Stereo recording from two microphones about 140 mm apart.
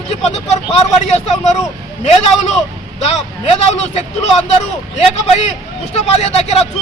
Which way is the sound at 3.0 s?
50° left (ahead or behind).